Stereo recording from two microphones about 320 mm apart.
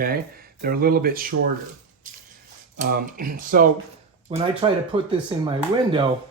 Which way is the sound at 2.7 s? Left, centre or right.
Right.